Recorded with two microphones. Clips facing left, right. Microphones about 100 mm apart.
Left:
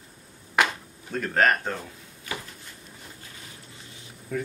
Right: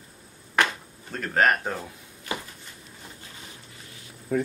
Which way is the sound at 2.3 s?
25° right (ahead or behind).